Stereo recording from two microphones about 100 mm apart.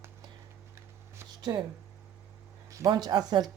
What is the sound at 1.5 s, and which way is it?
Speech, 35° right (ahead or behind).